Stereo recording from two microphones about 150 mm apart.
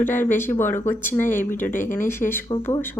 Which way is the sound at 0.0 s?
15° left (ahead or behind).